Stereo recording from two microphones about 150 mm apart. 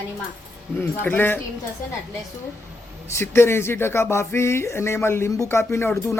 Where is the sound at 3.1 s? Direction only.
15° left (ahead or behind).